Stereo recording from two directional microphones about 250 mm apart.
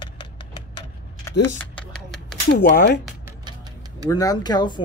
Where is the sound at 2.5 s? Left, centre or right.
Left.